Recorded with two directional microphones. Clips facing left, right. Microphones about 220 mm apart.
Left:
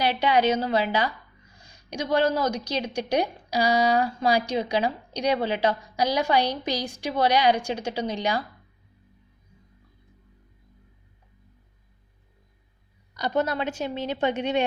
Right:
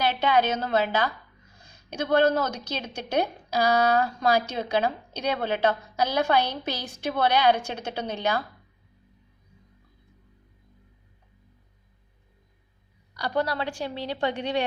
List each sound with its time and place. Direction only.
0.0 s a woman's voice: 15° left (ahead or behind)
2.3 s a woman's voice: 10° left (ahead or behind)
13.1 s a woman's voice: 20° left (ahead or behind)